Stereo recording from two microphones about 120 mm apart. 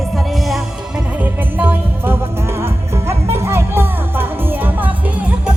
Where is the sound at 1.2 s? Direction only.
15° right (ahead or behind).